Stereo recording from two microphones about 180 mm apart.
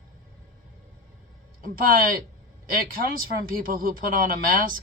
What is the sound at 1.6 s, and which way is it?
Speech, 55° right (ahead or behind).